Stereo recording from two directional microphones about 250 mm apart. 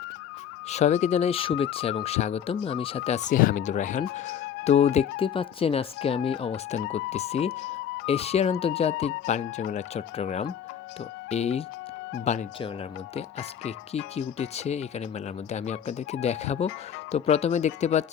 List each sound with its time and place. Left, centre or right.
0.7 s speech: left